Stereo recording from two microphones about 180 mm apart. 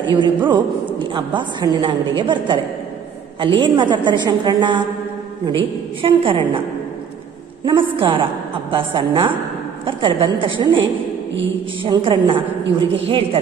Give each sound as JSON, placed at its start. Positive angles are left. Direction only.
{"t": 0.0, "sound": "a woman's voice", "side_deg": -25}
{"t": 6.0, "sound": "a woman's voice", "side_deg": -30}
{"t": 7.6, "sound": "a woman's voice", "side_deg": -30}
{"t": 11.8, "sound": "a woman's voice", "side_deg": -30}
{"t": 12.6, "sound": "a woman's voice", "side_deg": -90}